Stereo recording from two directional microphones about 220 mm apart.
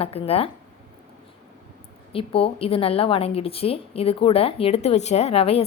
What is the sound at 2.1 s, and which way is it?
A woman's voice, 25° left (ahead or behind).